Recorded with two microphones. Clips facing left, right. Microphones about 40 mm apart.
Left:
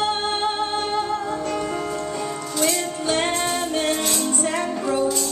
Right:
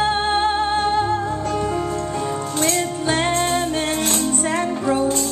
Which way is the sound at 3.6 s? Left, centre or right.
Centre.